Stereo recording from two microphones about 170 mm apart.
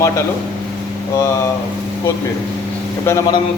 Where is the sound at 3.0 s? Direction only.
15° left (ahead or behind).